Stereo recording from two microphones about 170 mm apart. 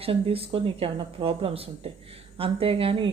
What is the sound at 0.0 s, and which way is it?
A woman's voice, 35° right (ahead or behind).